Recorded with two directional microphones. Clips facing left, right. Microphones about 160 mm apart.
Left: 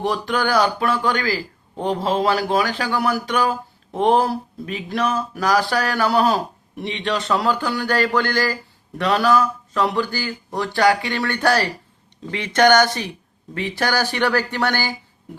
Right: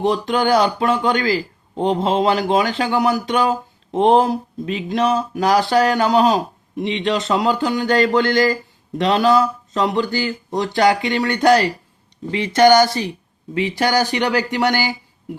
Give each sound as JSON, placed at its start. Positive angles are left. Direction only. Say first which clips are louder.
{"t": 0.0, "sound": "speech", "louder": "right 4 dB", "side_deg": -20}